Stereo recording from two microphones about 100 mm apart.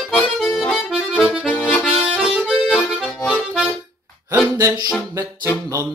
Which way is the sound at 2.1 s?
5° right (ahead or behind).